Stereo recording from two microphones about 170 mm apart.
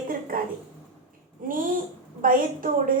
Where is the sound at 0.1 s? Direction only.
55° right (ahead or behind).